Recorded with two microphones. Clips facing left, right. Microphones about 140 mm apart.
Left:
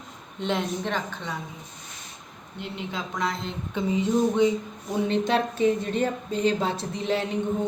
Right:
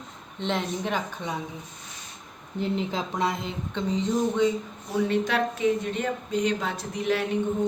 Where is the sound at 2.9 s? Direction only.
30° right (ahead or behind).